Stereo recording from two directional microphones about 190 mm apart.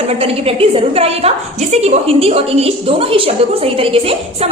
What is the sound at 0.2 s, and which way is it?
A woman's voice, 30° right (ahead or behind).